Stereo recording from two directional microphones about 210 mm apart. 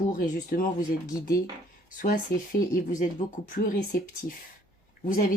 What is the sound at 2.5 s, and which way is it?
Speech, 40° left (ahead or behind).